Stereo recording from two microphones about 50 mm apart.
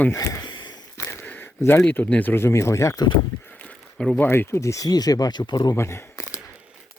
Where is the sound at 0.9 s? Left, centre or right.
Left.